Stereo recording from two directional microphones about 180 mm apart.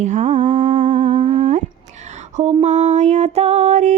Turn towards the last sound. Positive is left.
turn(degrees=-40)  # may be behind; listen again after turning